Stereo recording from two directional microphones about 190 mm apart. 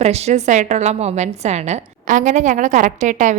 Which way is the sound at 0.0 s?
35° right (ahead or behind).